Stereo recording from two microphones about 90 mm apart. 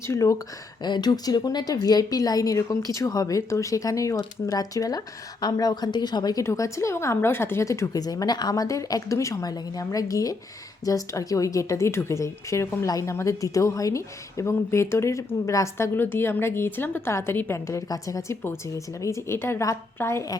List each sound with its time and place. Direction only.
0.1 s a woman's voice: 35° left (ahead or behind)
0.8 s a woman's voice: 55° left (ahead or behind)
6.4 s a woman's voice: 35° left (ahead or behind)